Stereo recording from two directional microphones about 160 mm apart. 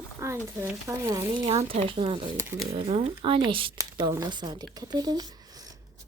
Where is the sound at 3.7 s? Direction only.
25° right (ahead or behind).